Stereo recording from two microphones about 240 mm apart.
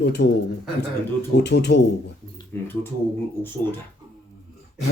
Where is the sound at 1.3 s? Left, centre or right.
Left.